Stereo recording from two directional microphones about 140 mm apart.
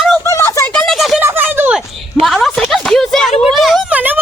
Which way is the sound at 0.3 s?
20° left (ahead or behind).